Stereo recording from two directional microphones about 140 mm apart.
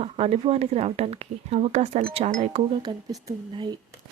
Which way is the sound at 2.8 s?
30° right (ahead or behind).